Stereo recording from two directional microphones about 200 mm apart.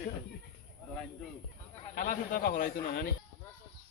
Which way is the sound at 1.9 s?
45° left (ahead or behind).